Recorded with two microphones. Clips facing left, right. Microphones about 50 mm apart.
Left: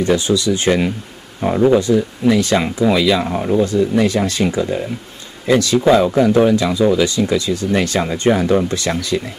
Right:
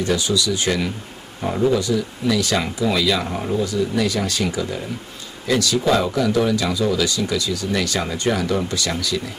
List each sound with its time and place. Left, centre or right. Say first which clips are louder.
0.0 s speech: left 5 dB; left
3.6 s speech: left 6 dB; left